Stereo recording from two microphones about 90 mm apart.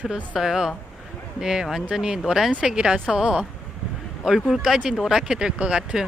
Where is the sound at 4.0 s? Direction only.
5° right (ahead or behind).